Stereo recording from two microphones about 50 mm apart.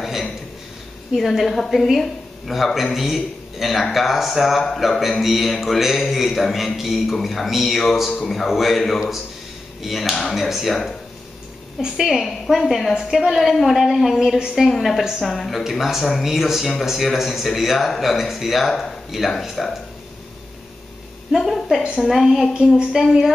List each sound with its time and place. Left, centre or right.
0.0 s a sound: centre
1.1 s a man's voice: centre
11.8 s a man's voice: centre
21.4 s a sound: centre
21.9 s a man's voice: centre
22.5 s a woman's voice: centre
22.9 s a woman's voice: centre